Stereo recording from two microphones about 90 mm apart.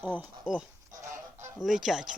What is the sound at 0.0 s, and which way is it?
Speech, 20° right (ahead or behind).